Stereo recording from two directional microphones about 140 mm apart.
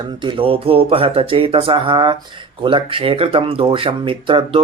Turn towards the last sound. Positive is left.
turn(degrees=-40)  # may be behind; listen again after turning